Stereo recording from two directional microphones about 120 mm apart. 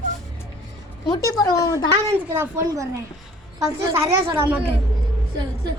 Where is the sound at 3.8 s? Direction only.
20° right (ahead or behind).